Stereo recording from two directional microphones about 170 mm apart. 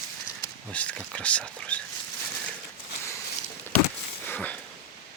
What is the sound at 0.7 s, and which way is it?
Speech, 10° left (ahead or behind).